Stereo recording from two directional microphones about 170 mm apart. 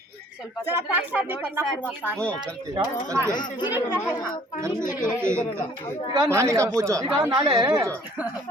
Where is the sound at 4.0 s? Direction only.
20° left (ahead or behind).